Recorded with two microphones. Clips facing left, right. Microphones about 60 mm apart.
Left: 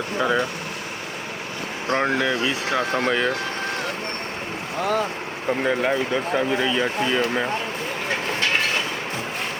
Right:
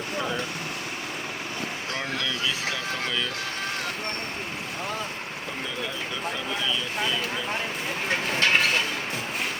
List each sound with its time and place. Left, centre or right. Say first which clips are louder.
1.9 s speech: left 11 dB; left
5.6 s speech: left 12 dB; left